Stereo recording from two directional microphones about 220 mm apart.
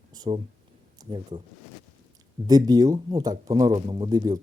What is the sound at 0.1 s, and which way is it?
Speech, 20° right (ahead or behind).